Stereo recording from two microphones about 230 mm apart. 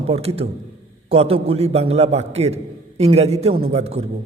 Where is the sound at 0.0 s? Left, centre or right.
Right.